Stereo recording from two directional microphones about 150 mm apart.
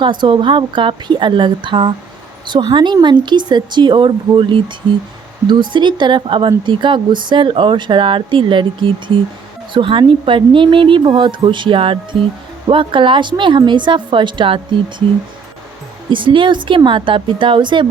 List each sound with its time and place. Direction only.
0.0 s speech: 30° right (ahead or behind)
16.0 s speech: 35° right (ahead or behind)